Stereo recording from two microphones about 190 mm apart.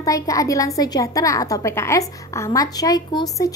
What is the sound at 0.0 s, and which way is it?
A woman's voice, 20° left (ahead or behind).